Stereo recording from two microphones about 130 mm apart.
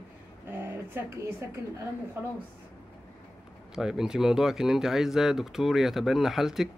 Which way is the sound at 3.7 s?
5° right (ahead or behind).